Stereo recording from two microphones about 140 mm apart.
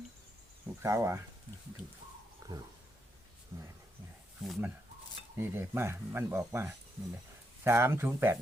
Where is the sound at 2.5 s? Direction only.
25° right (ahead or behind).